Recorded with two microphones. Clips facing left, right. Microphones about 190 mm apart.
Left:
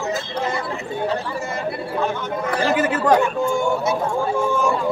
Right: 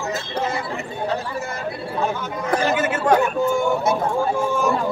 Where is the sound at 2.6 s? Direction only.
35° left (ahead or behind).